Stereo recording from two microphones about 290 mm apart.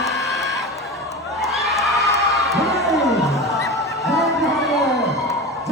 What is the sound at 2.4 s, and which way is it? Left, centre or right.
Crowd, centre.